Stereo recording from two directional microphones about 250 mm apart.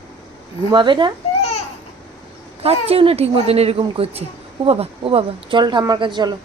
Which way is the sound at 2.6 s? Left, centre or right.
Right.